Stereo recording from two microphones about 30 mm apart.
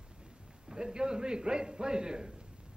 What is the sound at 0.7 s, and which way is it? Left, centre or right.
A man's voice, right.